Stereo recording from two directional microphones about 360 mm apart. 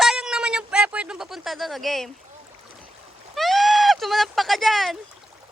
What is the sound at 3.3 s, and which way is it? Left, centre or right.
Speech, centre.